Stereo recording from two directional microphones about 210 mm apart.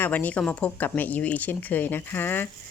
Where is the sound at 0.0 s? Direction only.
10° left (ahead or behind).